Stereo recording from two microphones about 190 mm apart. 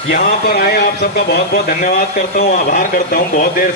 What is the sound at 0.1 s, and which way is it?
Speech, 50° left (ahead or behind).